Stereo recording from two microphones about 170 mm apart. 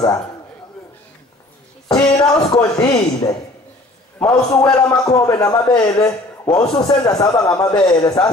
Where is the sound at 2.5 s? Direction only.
25° left (ahead or behind).